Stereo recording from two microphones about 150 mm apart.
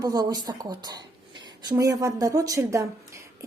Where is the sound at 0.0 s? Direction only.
25° right (ahead or behind).